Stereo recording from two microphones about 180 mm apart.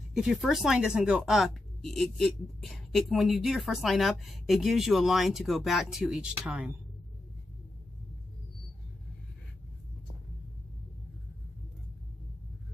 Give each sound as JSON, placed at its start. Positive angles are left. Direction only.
{"t": 0.1, "sound": "a woman's voice", "side_deg": 0}